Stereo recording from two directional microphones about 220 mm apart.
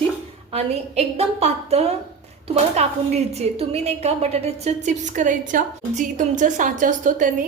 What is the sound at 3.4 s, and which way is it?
A woman's voice, 30° right (ahead or behind).